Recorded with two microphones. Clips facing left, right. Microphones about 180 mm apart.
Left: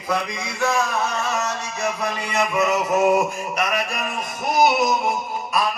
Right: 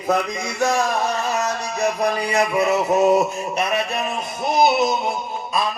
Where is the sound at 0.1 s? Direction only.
40° right (ahead or behind); by 4.9 s 25° right (ahead or behind).